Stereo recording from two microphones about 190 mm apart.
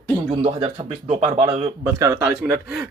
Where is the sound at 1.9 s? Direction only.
15° right (ahead or behind).